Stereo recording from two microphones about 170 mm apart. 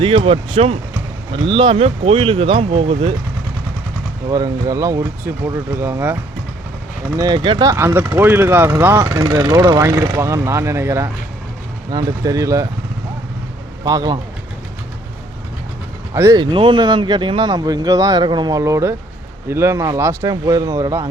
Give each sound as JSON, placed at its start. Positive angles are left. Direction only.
{"t": 0.2, "sound": "speech", "side_deg": -35}
{"t": 4.3, "sound": "speech", "side_deg": -20}
{"t": 7.2, "sound": "speech", "side_deg": -25}
{"t": 13.8, "sound": "speech", "side_deg": -25}
{"t": 16.1, "sound": "speech", "side_deg": -20}